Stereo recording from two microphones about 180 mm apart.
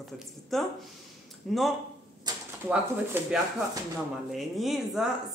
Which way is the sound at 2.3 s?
20° right (ahead or behind).